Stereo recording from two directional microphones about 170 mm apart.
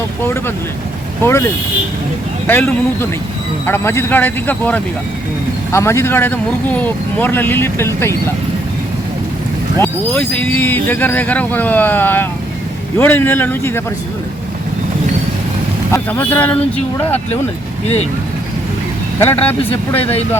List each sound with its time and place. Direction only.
1.2 s speech: 15° left (ahead or behind)
2.5 s speech: 10° left (ahead or behind)
3.7 s speech: 15° left (ahead or behind)
9.7 s speech: 10° left (ahead or behind)
15.9 s speech: 10° left (ahead or behind)
19.2 s speech: 10° left (ahead or behind)